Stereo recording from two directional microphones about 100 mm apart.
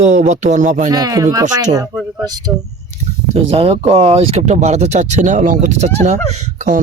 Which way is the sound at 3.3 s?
75° right (ahead or behind).